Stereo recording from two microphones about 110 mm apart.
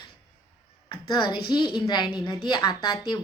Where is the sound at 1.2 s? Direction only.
45° left (ahead or behind).